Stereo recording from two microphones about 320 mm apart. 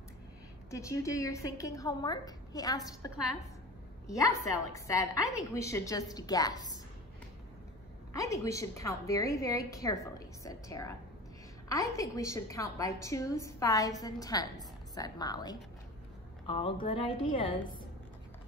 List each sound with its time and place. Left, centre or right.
0.7 s a woman's voice: centre
4.1 s a woman's voice: centre
8.1 s a woman's voice: centre